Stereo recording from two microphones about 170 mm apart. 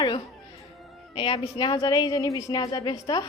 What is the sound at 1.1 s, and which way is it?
A woman's voice, 30° left (ahead or behind).